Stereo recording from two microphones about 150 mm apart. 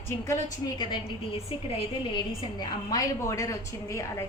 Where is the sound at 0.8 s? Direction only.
30° left (ahead or behind).